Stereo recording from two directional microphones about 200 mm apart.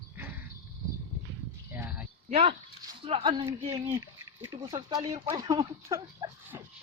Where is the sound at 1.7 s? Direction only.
10° right (ahead or behind).